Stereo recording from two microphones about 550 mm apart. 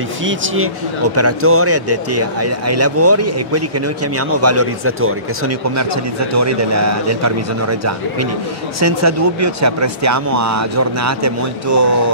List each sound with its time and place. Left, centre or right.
0.2 s speech: right
6.3 s speech: right